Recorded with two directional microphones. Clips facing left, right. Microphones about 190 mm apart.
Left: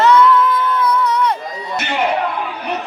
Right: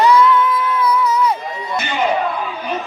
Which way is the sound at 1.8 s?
60° left (ahead or behind).